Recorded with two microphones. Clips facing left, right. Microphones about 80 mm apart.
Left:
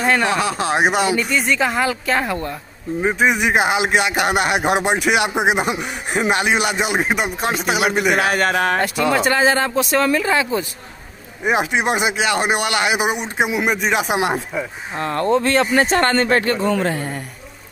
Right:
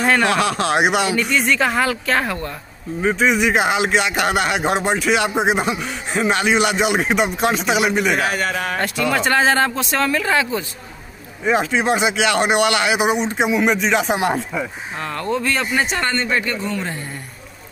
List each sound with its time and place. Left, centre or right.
0.0 s speech: centre
8.1 s speech: left
9.1 s speech: centre
9.9 s speech: centre
15.0 s speech: left
16.7 s a man's voice: left